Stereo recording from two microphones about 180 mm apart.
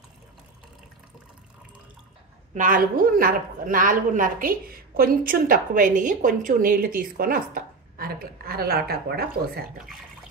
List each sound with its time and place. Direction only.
2.5 s speech: 50° right (ahead or behind)